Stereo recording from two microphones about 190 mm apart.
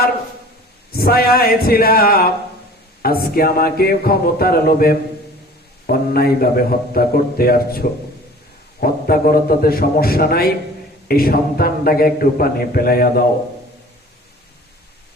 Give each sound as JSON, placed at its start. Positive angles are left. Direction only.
{"t": 0.9, "sound": "a man's voice", "side_deg": 55}